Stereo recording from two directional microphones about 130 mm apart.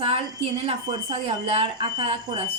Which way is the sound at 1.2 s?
45° right (ahead or behind).